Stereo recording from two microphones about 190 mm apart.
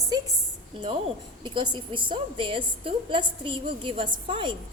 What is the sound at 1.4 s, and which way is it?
A woman's voice, 25° right (ahead or behind).